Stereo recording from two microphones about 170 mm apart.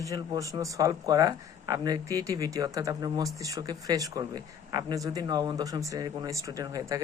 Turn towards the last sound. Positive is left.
turn(degrees=-20)  # may be behind; listen again after turning